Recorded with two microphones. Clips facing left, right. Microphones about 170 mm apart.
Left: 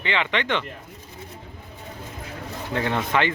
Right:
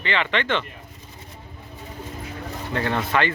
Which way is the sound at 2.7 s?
15° left (ahead or behind).